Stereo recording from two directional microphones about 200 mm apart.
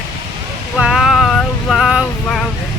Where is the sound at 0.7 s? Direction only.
Centre (ahead or behind).